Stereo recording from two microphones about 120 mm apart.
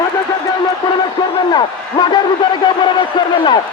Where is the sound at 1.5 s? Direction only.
35° left (ahead or behind).